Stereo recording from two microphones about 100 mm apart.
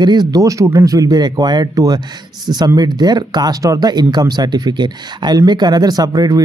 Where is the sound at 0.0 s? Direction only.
45° right (ahead or behind).